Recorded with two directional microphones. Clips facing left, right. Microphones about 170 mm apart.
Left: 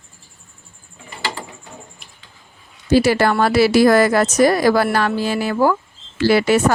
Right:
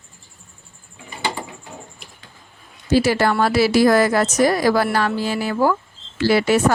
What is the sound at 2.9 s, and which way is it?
A woman's voice, 60° left (ahead or behind).